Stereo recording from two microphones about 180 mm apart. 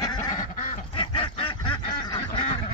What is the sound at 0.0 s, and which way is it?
Goose, 20° left (ahead or behind).